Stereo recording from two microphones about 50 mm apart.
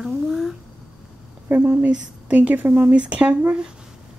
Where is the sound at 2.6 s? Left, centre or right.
Right.